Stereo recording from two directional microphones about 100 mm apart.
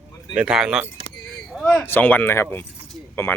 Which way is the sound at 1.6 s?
20° left (ahead or behind).